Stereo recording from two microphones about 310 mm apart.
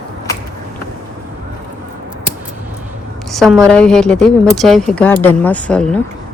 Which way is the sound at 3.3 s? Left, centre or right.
Centre.